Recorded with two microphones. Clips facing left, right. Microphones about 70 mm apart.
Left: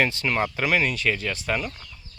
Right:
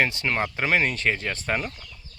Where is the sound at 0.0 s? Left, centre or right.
Right.